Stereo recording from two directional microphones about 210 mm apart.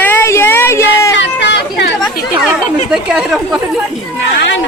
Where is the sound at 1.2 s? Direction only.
55° left (ahead or behind).